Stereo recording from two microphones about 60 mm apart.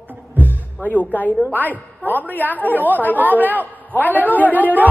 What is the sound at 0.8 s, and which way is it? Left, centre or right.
A woman's voice, left.